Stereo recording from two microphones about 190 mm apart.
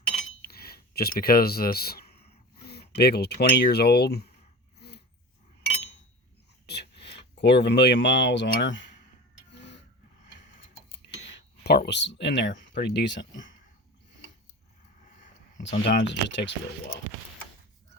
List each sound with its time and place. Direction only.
0.4 s a sound: 55° left (ahead or behind)
2.9 s speech: 60° left (ahead or behind)
4.8 s dog: 60° left (ahead or behind)
6.7 s speech: 60° left (ahead or behind)
9.5 s a sound: 65° left (ahead or behind)
11.2 s speech: 70° left (ahead or behind)
15.6 s speech: 60° left (ahead or behind)